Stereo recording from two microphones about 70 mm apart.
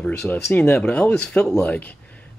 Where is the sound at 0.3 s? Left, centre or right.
Left.